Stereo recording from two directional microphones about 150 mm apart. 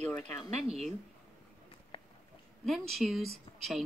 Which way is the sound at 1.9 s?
40° left (ahead or behind).